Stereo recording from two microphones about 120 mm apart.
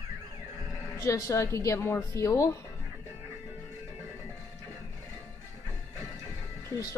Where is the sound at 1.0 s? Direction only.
25° left (ahead or behind).